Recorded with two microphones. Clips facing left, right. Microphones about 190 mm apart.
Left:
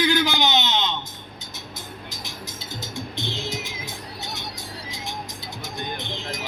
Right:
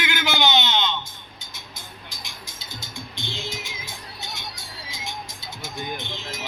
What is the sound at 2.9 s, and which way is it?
Music, centre (ahead or behind).